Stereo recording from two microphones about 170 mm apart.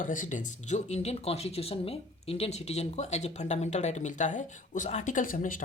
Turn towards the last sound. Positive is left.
turn(degrees=55)  # may be behind; listen again after turning